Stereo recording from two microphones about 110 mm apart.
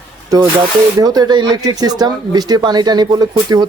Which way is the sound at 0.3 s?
35° right (ahead or behind).